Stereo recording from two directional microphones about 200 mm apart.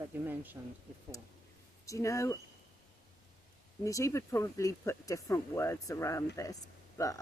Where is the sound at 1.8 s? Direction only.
15° left (ahead or behind).